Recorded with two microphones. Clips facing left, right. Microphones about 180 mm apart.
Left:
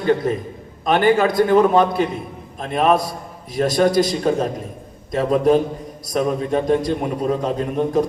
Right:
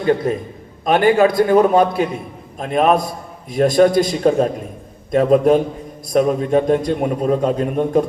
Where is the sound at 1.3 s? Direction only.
45° right (ahead or behind).